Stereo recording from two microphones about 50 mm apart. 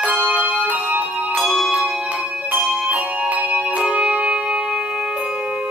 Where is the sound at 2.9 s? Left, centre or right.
Right.